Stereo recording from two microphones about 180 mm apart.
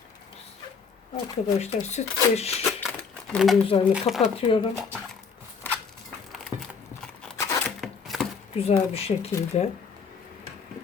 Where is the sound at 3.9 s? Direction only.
5° right (ahead or behind).